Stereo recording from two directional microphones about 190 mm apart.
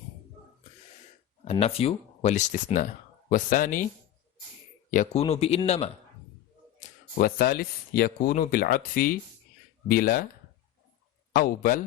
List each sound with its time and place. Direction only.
1.5 s speech: 30° left (ahead or behind)
4.9 s speech: 45° left (ahead or behind)
5.2 s speech: 35° left (ahead or behind)
6.7 s speech: 50° left (ahead or behind)
11.3 s speech: 50° left (ahead or behind)